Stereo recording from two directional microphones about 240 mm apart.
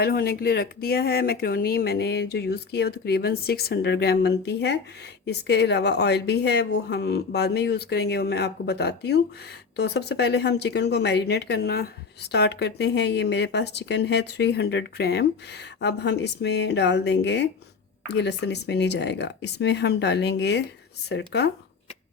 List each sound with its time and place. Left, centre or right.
0.0 s speech: left